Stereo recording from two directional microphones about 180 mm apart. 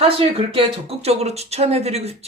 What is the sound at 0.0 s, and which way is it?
Speech, 30° right (ahead or behind).